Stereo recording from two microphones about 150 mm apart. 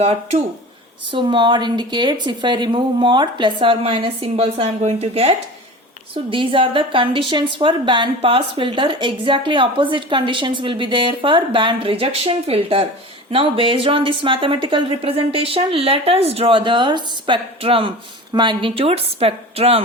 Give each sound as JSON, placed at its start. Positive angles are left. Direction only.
{"t": 0.0, "sound": "speech", "side_deg": -45}
{"t": 1.1, "sound": "speech", "side_deg": -30}
{"t": 6.3, "sound": "speech", "side_deg": -35}